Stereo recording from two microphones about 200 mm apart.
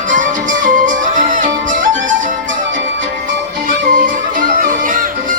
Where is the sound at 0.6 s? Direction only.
40° right (ahead or behind).